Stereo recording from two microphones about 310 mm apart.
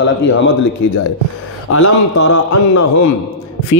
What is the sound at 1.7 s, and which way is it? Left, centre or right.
Speech, left.